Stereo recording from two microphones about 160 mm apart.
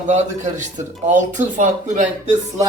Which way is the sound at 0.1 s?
50° right (ahead or behind).